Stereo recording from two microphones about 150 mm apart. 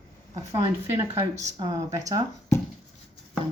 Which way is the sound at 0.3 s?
25° right (ahead or behind).